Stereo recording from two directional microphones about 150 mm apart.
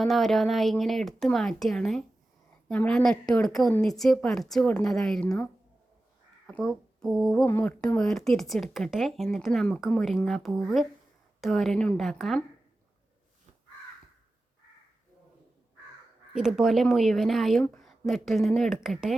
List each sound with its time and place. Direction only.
0.0 s speech: centre (ahead or behind)
6.5 s speech: centre (ahead or behind)
7.4 s speech: 15° left (ahead or behind)
7.9 s speech: 5° left (ahead or behind)
16.3 s speech: 5° right (ahead or behind)